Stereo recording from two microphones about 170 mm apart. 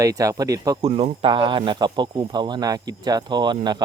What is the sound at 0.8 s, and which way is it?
Speech, 35° right (ahead or behind).